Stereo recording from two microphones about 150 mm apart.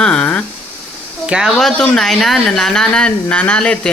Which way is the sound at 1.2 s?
5° right (ahead or behind).